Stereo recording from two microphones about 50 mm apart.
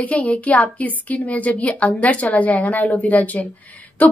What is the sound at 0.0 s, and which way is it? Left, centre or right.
A woman's voice, left.